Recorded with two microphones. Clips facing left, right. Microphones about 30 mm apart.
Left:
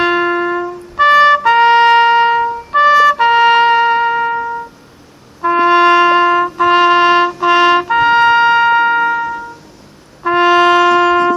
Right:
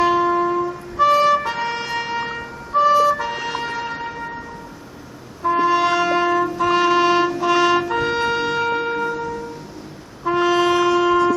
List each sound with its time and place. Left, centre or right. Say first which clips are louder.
0.0 s music: left 3 dB; left
0.9 s trumpet: left 7 dB; left
5.4 s music: left 7 dB; left
7.4 s trumpet: left 7 dB; left
10.2 s music: left 7 dB; left